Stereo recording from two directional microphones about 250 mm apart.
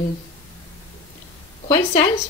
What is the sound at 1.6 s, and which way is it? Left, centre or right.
Speech, centre.